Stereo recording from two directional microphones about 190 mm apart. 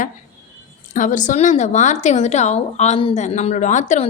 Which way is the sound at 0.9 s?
40° left (ahead or behind).